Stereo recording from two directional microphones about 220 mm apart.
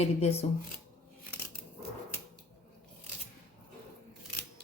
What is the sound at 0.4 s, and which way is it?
Speech, 30° left (ahead or behind).